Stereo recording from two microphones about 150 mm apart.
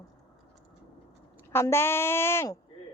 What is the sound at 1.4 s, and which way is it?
A woman's voice, 15° left (ahead or behind).